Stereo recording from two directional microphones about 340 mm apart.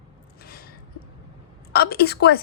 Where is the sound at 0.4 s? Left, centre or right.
Left.